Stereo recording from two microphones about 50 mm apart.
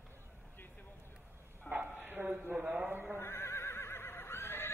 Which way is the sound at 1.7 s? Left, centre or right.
Right.